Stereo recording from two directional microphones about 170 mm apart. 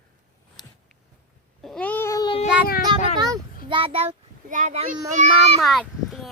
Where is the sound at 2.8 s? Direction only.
25° right (ahead or behind).